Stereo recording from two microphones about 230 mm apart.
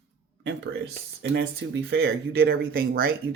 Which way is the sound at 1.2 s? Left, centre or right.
Right.